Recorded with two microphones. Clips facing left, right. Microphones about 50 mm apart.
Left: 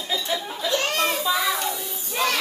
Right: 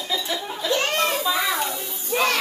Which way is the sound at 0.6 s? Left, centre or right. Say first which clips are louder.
Right 2 dB; right.